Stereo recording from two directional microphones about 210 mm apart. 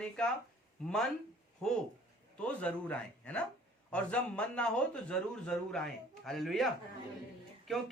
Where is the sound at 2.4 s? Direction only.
5° left (ahead or behind).